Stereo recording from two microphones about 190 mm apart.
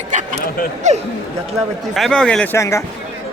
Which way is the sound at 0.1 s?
40° right (ahead or behind).